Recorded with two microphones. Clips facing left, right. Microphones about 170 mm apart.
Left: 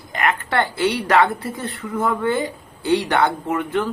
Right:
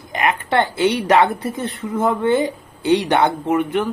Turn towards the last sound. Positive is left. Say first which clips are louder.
# right 3 dB
turn(degrees=-20)  # may be behind; listen again after turning